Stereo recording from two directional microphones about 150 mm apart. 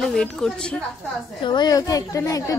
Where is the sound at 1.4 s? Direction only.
30° left (ahead or behind).